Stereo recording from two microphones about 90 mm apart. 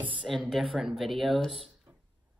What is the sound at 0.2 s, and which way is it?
A woman's voice, centre (ahead or behind).